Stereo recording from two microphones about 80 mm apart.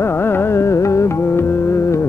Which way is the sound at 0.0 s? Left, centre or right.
Left.